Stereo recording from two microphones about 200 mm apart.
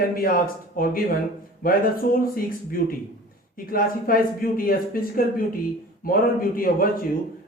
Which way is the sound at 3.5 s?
45° left (ahead or behind).